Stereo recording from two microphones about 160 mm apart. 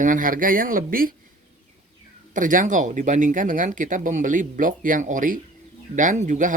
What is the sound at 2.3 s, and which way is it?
Speech, 55° right (ahead or behind).